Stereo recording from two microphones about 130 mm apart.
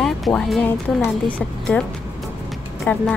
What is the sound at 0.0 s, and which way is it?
Speech, 5° left (ahead or behind).